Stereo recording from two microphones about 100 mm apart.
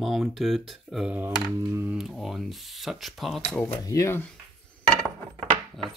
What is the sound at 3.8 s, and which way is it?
Speech, 30° left (ahead or behind).